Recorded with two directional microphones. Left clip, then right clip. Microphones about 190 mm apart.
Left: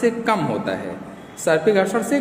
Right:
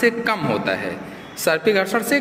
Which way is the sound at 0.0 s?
5° left (ahead or behind).